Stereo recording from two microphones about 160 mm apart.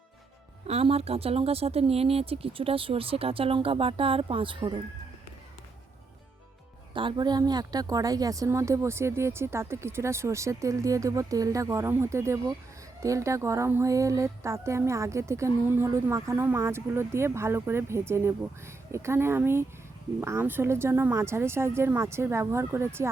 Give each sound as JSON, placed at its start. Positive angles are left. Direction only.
{"t": 0.7, "sound": "speech", "side_deg": -40}
{"t": 6.9, "sound": "a woman's voice", "side_deg": -30}